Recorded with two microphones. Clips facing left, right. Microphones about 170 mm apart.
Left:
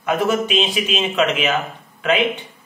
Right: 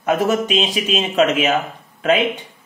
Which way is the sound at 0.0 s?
40° right (ahead or behind).